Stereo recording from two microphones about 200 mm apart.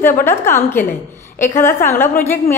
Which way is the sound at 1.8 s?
10° left (ahead or behind).